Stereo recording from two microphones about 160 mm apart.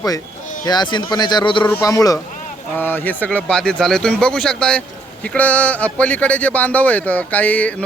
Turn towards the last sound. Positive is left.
turn(degrees=10)  # may be behind; listen again after turning